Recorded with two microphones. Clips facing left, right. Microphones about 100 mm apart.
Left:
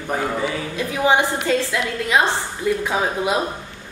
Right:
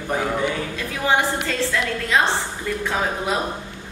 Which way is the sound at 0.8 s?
20° left (ahead or behind).